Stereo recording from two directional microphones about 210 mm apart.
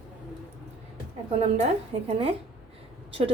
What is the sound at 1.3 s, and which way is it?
Speech, 30° right (ahead or behind).